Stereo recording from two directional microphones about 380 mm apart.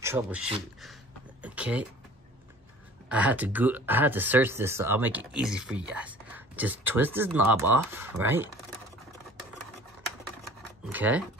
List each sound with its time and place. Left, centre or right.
0.0 s speech: centre
3.1 s speech: centre
10.4 s a sound: centre